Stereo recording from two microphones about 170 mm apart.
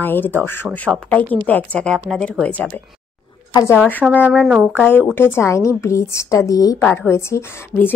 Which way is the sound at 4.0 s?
10° right (ahead or behind).